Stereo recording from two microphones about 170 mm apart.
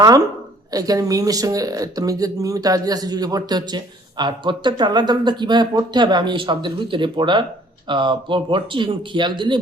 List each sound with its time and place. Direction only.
0.0 s speech: 20° right (ahead or behind)